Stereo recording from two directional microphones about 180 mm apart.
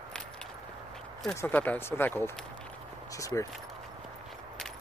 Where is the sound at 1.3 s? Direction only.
10° left (ahead or behind).